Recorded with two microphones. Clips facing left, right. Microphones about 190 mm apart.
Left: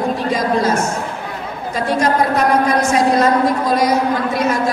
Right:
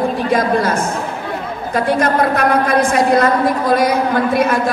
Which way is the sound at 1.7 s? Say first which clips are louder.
Right 1 dB; 55° right (ahead or behind).